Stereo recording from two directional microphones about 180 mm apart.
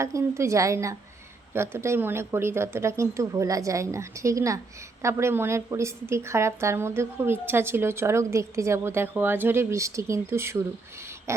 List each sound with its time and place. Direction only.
0.0 s a woman's voice: 15° right (ahead or behind)